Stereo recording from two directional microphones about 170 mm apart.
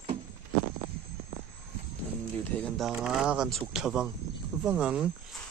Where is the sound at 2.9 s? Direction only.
5° right (ahead or behind).